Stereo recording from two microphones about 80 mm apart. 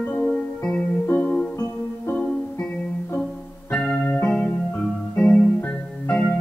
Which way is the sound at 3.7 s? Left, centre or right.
Centre.